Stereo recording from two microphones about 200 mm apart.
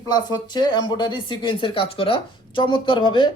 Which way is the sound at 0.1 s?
20° left (ahead or behind).